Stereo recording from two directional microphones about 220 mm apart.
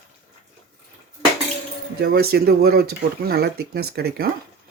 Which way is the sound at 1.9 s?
45° right (ahead or behind).